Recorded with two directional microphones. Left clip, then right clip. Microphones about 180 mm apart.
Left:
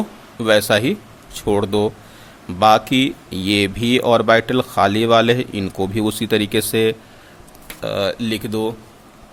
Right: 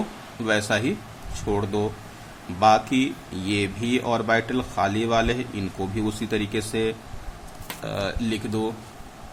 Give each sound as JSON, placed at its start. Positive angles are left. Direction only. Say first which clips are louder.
{"t": 0.4, "sound": "speech", "louder": "left 8 dB", "side_deg": 45}